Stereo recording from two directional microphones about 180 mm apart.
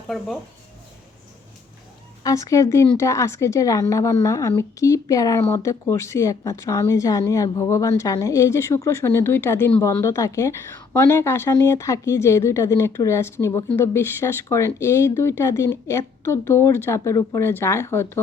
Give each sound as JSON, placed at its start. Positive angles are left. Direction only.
{"t": 2.2, "sound": "speech", "side_deg": 15}